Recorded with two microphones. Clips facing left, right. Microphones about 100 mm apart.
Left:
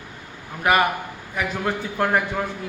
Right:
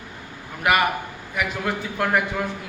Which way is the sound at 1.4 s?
35° left (ahead or behind).